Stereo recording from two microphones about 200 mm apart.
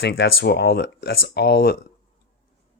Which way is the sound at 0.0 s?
60° left (ahead or behind).